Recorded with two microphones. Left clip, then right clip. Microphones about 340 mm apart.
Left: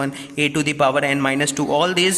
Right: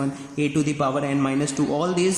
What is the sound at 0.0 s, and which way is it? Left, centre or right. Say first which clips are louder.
A man's voice: left 5 dB; left.